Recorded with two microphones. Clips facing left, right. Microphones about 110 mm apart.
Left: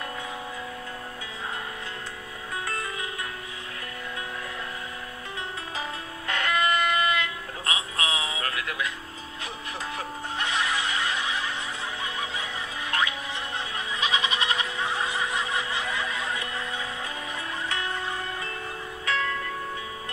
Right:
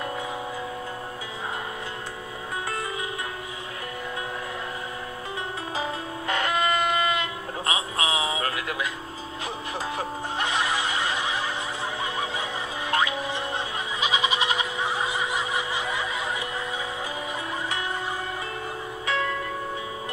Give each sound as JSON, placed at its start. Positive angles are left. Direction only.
{"t": 5.8, "sound": "music", "side_deg": -20}
{"t": 9.9, "sound": "music", "side_deg": -25}
{"t": 12.0, "sound": "snicker", "side_deg": -30}
{"t": 12.9, "sound": "music", "side_deg": -30}
{"t": 13.9, "sound": "snicker", "side_deg": -10}
{"t": 19.0, "sound": "music", "side_deg": -15}